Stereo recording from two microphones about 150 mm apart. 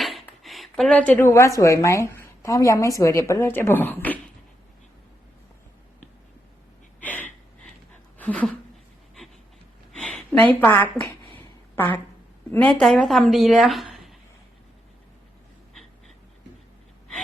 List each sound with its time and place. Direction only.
0.0 s speech: centre (ahead or behind)
7.0 s gasp: 10° left (ahead or behind)
8.2 s a sound: 10° left (ahead or behind)
10.0 s a woman's voice: 5° left (ahead or behind)
12.5 s a woman's voice: 10° left (ahead or behind)